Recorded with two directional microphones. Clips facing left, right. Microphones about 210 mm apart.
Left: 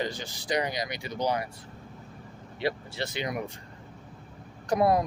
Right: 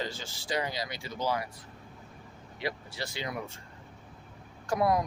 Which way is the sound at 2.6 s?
25° left (ahead or behind).